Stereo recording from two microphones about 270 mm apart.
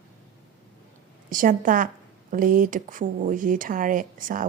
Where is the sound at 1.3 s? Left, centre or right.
Right.